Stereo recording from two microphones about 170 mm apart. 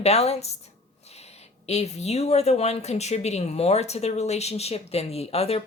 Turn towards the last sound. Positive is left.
turn(degrees=35)  # may be behind; listen again after turning